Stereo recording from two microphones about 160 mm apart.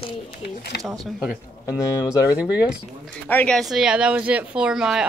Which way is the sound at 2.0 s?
20° left (ahead or behind).